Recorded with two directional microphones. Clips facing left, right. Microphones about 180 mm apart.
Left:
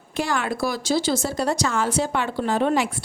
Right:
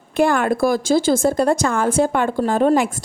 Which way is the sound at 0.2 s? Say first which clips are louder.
Right 8 dB; 55° right (ahead or behind).